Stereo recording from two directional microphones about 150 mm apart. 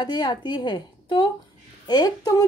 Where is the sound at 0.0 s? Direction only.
30° left (ahead or behind).